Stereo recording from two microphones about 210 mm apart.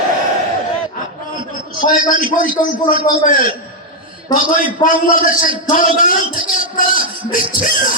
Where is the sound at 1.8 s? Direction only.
40° left (ahead or behind).